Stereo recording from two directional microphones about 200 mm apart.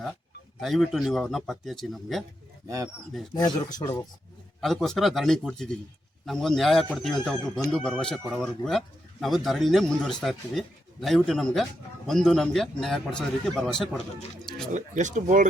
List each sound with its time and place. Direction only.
0.6 s speech: centre (ahead or behind)
2.6 s speech: 15° right (ahead or behind)
3.3 s speech: 20° left (ahead or behind)
4.6 s speech: centre (ahead or behind)
14.7 s speech: 40° right (ahead or behind)